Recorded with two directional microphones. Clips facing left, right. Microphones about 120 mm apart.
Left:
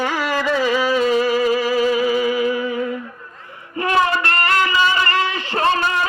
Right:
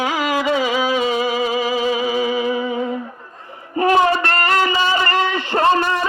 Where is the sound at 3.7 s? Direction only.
30° right (ahead or behind).